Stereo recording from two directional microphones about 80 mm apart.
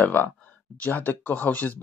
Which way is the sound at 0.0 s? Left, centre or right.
Left.